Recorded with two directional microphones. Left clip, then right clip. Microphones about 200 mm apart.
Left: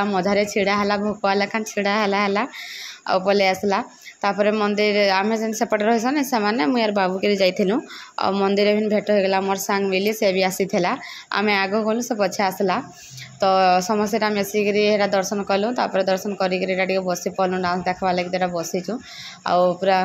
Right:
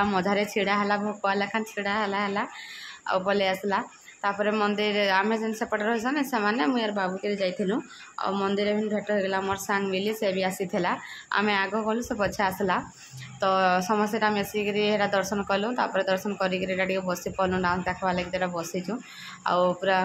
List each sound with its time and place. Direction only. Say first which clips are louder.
0.0 s speech: left 5 dB; 15° left (ahead or behind)